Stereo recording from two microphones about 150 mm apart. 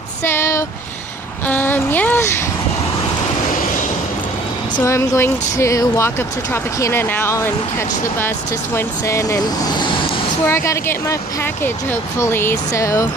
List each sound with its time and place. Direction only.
0.2 s a sound: 15° left (ahead or behind)
4.7 s speech: 20° left (ahead or behind)
10.4 s speech: 20° left (ahead or behind)